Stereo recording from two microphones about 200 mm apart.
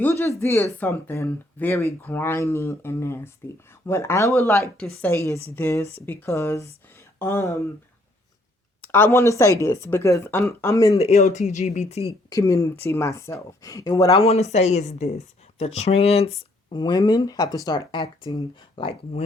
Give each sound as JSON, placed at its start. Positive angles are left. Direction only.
{"t": 0.0, "sound": "speech", "side_deg": 10}
{"t": 8.8, "sound": "speech", "side_deg": 10}
{"t": 10.9, "sound": "speech", "side_deg": 35}
{"t": 12.3, "sound": "speech", "side_deg": 15}
{"t": 14.5, "sound": "speech", "side_deg": 35}